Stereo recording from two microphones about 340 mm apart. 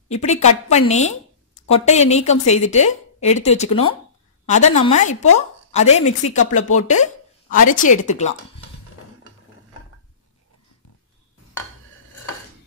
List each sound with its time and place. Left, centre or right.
0.1 s a woman's voice: centre